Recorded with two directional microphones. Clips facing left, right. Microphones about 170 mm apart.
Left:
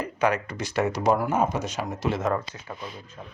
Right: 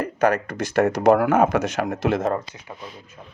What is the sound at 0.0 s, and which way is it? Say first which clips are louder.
Speech: right 4 dB; 50° right (ahead or behind).